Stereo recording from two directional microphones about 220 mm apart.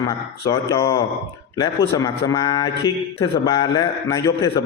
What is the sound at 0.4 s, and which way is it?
Speech, 15° left (ahead or behind).